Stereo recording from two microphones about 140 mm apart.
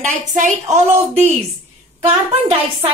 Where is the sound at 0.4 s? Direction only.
55° right (ahead or behind).